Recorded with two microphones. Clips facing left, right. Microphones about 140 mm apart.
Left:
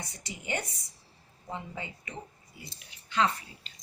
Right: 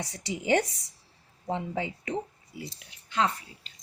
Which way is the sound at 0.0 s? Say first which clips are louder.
Right 9 dB; 90° right.